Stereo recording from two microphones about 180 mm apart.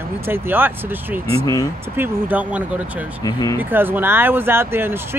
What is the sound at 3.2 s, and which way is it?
Speech, 20° left (ahead or behind).